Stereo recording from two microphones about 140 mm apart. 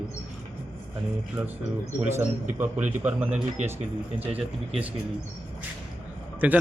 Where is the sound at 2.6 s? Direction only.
10° right (ahead or behind).